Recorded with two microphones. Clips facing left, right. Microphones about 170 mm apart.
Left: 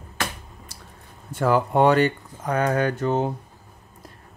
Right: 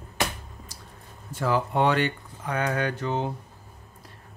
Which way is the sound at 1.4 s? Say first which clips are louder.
Left 5 dB; 50° left (ahead or behind).